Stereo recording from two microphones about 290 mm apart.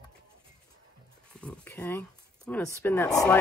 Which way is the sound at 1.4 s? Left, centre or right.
Centre.